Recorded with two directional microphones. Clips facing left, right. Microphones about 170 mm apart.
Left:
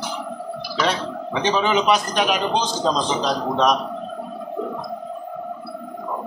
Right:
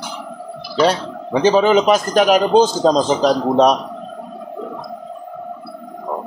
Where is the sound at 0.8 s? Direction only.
40° right (ahead or behind).